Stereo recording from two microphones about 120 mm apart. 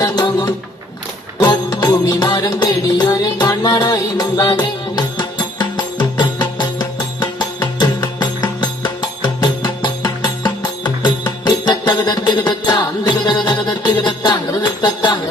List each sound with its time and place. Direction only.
0.0 s music: 35° left (ahead or behind)